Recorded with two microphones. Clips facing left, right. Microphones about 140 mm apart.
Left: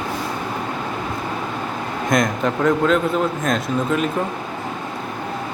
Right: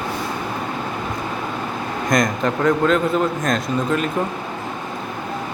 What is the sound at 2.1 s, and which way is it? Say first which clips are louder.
A man's voice: even; centre (ahead or behind).